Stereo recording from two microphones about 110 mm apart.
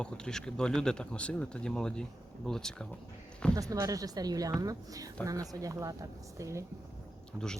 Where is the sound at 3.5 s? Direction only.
30° right (ahead or behind).